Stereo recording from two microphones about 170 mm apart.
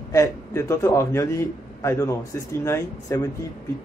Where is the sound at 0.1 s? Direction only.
15° left (ahead or behind).